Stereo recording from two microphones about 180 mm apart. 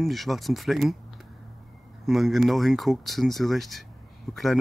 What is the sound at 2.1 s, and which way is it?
Speech, centre (ahead or behind).